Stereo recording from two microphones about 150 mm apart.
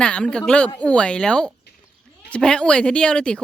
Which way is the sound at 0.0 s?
5° left (ahead or behind).